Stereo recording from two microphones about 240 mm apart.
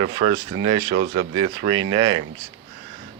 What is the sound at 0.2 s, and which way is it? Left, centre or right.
Speech, right.